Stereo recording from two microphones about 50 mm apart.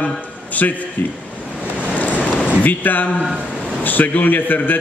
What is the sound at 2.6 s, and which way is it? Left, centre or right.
A man's voice, left.